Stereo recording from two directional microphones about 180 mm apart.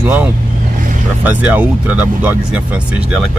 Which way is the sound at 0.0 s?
10° right (ahead or behind).